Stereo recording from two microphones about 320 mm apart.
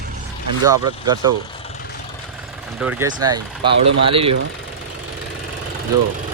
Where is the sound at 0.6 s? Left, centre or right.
Centre.